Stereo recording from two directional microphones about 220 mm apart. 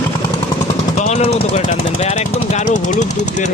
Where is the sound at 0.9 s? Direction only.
30° left (ahead or behind).